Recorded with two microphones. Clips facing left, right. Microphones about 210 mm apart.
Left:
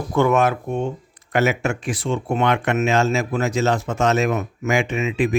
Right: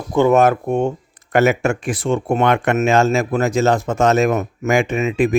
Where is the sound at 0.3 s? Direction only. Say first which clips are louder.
Right 5 dB; 45° right (ahead or behind).